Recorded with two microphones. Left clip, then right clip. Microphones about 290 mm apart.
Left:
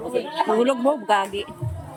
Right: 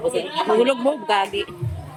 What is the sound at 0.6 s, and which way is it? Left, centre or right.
Speech, centre.